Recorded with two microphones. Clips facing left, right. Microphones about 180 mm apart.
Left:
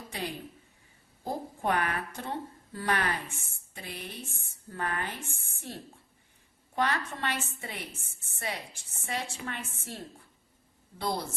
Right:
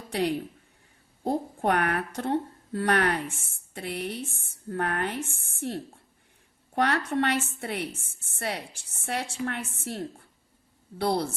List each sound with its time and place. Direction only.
0.1 s a woman's voice: 70° right (ahead or behind)